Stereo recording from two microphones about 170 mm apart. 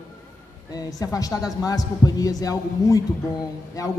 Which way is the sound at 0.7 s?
20° left (ahead or behind).